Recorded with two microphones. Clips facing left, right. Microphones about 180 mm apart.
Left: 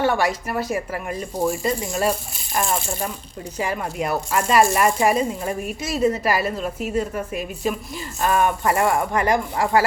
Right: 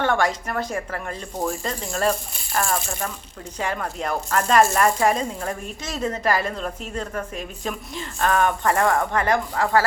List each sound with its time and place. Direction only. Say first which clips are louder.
0.0 s speech: left 1 dB; 10° left (ahead or behind)
2.6 s speech: left 1 dB; 25° left (ahead or behind)
3.6 s speech: left 2 dB; 10° left (ahead or behind)